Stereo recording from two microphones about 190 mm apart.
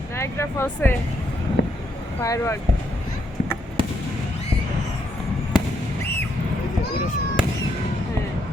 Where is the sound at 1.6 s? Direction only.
65° left (ahead or behind).